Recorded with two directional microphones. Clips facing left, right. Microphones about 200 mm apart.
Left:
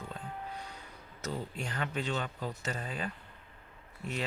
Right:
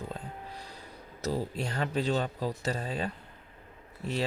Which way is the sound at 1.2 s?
35° right (ahead or behind).